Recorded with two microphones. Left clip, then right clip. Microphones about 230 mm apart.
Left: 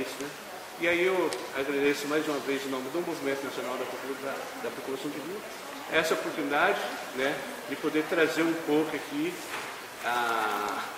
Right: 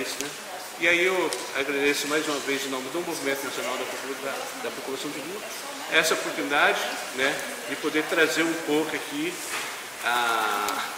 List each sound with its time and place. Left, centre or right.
0.8 s a man's voice: centre
5.9 s a man's voice: centre
10.0 s a man's voice: centre